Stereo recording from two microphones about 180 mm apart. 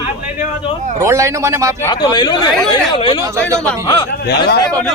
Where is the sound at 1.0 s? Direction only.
15° right (ahead or behind).